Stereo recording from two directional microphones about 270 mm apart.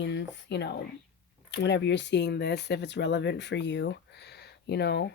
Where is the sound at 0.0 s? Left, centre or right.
Left.